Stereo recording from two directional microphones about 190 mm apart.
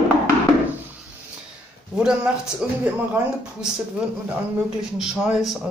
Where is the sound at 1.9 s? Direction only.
5° right (ahead or behind).